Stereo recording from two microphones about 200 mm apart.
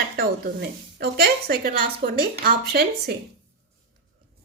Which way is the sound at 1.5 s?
45° right (ahead or behind).